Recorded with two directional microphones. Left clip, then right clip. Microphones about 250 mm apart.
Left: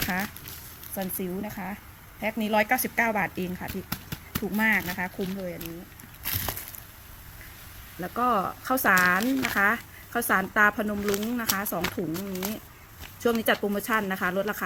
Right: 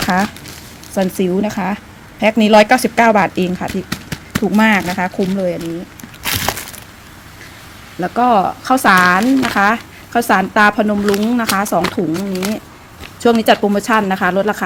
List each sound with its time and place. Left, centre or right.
0.9 s speech: centre
6.2 s a sound: right
8.0 s speech: centre